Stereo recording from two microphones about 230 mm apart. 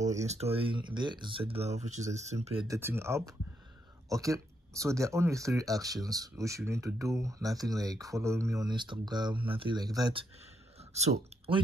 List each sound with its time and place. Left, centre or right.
0.2 s speech: right
2.7 s speech: centre
10.8 s a sound: right